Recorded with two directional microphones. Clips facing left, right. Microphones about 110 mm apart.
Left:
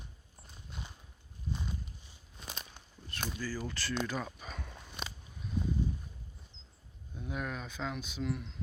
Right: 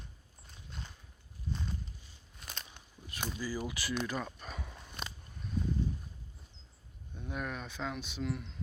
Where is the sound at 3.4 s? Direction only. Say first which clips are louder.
Right 2 dB; 10° right (ahead or behind).